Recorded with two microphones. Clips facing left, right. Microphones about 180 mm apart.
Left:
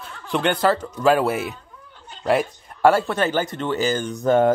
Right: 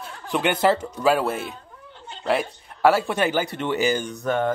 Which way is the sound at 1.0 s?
Centre (ahead or behind).